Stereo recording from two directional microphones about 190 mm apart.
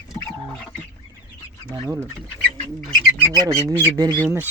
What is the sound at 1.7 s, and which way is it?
Speech, 20° right (ahead or behind).